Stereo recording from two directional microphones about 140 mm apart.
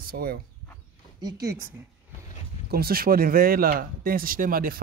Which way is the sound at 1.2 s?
30° right (ahead or behind).